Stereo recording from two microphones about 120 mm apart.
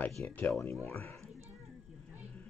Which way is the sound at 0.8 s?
20° left (ahead or behind).